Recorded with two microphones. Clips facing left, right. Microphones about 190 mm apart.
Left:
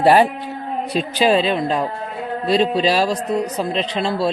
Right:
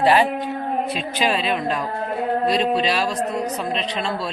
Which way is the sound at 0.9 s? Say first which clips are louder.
Left 6 dB; 30° left (ahead or behind).